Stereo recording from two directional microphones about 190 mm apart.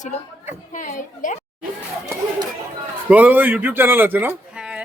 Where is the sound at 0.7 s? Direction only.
40° left (ahead or behind).